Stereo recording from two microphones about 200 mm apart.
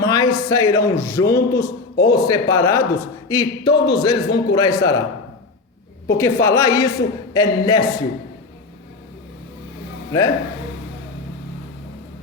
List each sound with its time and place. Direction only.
0.0 s a man's voice: 20° left (ahead or behind)
6.1 s a man's voice: 10° left (ahead or behind)
10.1 s speech: 15° left (ahead or behind)